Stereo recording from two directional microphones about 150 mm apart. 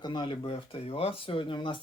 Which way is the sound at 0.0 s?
30° left (ahead or behind).